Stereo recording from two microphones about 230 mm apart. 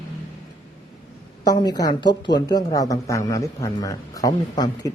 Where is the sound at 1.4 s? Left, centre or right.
Centre.